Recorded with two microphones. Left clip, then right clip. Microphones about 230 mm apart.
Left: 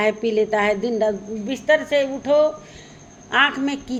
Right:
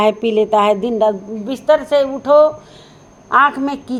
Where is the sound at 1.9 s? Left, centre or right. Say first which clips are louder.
Right 6 dB; centre.